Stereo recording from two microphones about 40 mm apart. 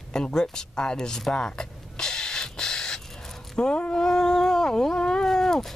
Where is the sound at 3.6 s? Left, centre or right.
Left.